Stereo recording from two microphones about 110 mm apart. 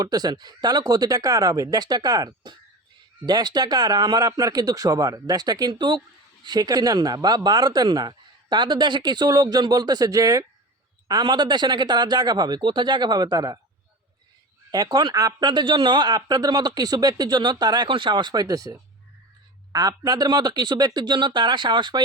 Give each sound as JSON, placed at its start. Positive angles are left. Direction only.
{"t": 0.0, "sound": "speech", "side_deg": -35}
{"t": 11.1, "sound": "speech", "side_deg": -45}
{"t": 14.7, "sound": "speech", "side_deg": -40}